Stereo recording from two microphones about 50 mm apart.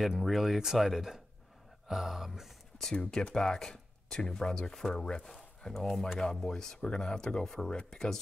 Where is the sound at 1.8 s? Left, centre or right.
Centre.